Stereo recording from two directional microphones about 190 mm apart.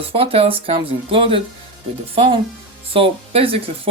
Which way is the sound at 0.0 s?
30° right (ahead or behind).